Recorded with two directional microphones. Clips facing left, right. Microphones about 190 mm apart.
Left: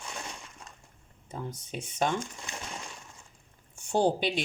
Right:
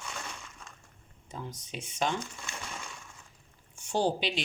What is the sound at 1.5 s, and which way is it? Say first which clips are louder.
Speech: left 3 dB; 55° left (ahead or behind).